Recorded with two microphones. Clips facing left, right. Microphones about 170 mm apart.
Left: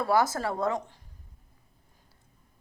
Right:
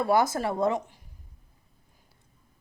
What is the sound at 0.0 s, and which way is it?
A woman's voice, 20° right (ahead or behind).